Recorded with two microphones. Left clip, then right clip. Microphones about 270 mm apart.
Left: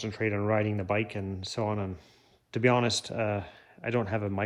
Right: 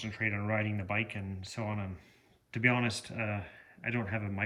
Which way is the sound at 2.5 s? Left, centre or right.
Centre.